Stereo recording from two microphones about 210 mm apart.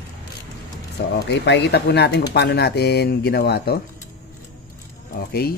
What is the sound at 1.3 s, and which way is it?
Speech, 55° left (ahead or behind).